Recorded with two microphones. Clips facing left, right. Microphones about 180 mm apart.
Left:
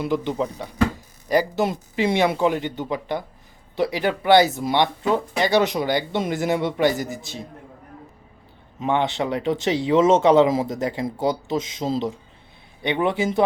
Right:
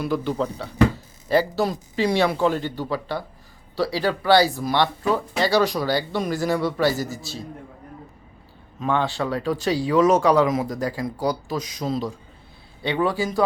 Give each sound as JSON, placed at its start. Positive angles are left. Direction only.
{"t": 0.0, "sound": "speech", "side_deg": 20}
{"t": 8.8, "sound": "speech", "side_deg": 20}